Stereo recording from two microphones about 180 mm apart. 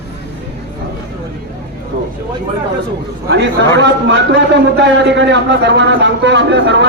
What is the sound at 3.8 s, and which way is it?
A man's voice, 85° right.